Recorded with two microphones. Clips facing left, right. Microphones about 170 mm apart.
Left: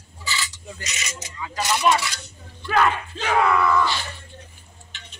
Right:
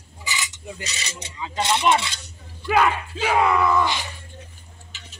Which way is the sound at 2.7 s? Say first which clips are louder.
Right 1 dB; 10° right (ahead or behind).